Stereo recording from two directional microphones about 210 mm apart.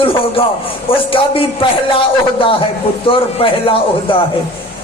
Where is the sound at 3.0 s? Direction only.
25° left (ahead or behind).